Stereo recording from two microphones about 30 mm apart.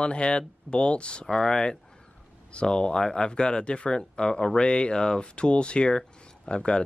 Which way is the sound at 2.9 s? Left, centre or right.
Left.